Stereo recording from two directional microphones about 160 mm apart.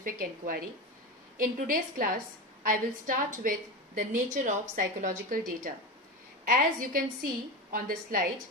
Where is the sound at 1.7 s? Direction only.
60° right (ahead or behind).